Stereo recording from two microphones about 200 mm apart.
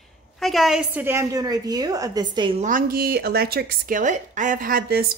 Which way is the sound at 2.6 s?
45° right (ahead or behind).